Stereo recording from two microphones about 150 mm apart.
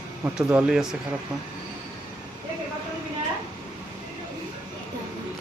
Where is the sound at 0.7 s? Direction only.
5° right (ahead or behind).